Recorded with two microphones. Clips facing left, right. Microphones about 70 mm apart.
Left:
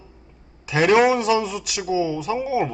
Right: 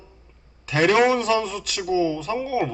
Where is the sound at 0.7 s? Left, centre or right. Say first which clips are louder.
Left 2 dB; centre.